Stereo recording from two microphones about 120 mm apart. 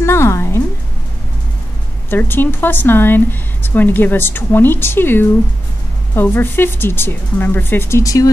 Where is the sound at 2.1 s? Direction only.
15° left (ahead or behind).